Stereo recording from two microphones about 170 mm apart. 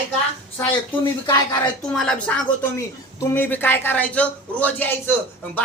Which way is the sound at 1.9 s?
5° left (ahead or behind).